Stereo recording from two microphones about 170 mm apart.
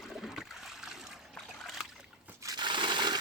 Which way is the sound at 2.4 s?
25° right (ahead or behind).